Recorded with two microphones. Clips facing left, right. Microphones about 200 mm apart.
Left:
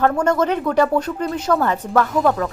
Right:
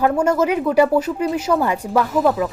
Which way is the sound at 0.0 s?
10° right (ahead or behind).